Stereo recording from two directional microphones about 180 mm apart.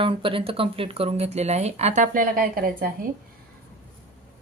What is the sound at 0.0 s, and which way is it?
A woman's voice, 30° right (ahead or behind).